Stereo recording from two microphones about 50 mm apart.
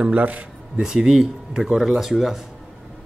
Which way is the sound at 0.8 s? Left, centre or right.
Centre.